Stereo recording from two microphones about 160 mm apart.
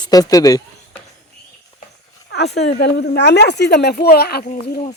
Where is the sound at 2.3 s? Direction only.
90° left.